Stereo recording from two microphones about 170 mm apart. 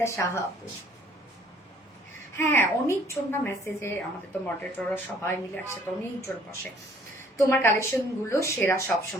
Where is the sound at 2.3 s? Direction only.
15° left (ahead or behind).